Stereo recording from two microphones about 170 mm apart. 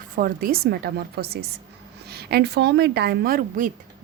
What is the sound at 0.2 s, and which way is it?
A woman's voice, 55° right (ahead or behind).